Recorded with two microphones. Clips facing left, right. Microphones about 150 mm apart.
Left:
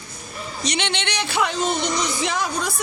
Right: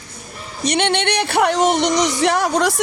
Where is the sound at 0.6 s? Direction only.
55° right (ahead or behind).